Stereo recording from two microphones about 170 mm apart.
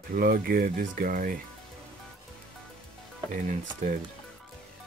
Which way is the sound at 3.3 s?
50° right (ahead or behind).